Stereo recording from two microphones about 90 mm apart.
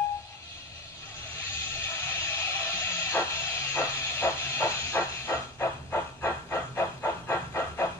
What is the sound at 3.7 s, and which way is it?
Hiss, 25° left (ahead or behind).